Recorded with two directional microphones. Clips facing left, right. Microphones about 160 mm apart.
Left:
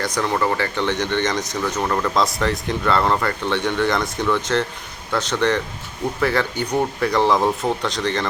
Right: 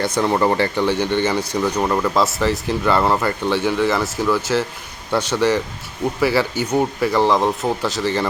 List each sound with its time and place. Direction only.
0.0 s speech: 25° right (ahead or behind)
0.8 s a man's voice: 10° right (ahead or behind)